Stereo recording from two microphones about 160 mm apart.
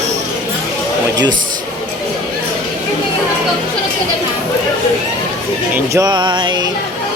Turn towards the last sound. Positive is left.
turn(degrees=-30)  # may be behind; listen again after turning